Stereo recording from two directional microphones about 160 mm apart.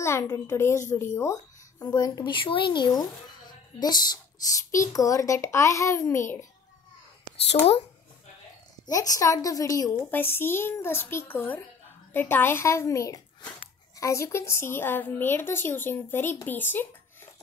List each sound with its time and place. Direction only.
0.0 s a woman's voice: 20° left (ahead or behind)
8.8 s a woman's voice: 20° left (ahead or behind)